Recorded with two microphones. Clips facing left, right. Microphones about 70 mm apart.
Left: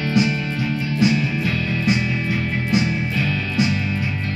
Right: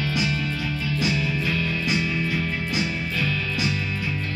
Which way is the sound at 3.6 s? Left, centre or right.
Left.